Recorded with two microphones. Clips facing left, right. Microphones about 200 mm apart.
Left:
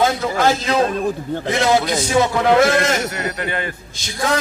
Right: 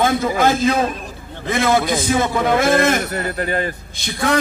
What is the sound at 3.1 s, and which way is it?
Speech, 40° right (ahead or behind).